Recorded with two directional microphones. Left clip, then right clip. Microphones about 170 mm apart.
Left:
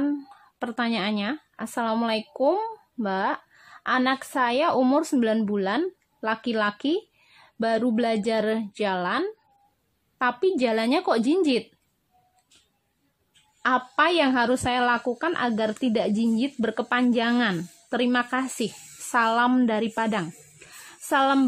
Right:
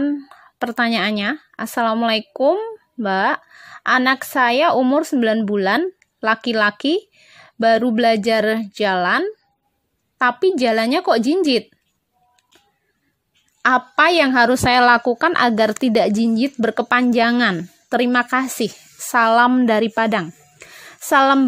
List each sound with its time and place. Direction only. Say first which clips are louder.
0.0 s speech: right 5 dB; 30° right (ahead or behind)
13.6 s a woman's voice: right 7 dB; 30° right (ahead or behind)